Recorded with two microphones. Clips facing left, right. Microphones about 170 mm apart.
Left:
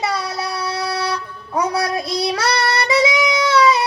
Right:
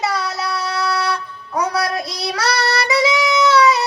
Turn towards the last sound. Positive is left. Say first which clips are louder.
# right 1 dB
turn(degrees=25)  # may be behind; listen again after turning